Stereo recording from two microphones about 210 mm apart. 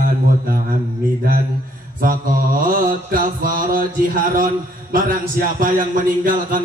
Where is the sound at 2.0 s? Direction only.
40° right (ahead or behind).